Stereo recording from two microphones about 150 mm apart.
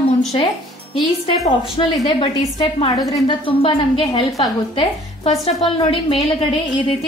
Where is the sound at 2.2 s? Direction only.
40° left (ahead or behind).